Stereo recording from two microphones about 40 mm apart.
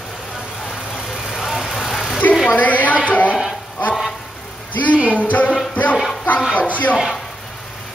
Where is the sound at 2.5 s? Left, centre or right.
Left.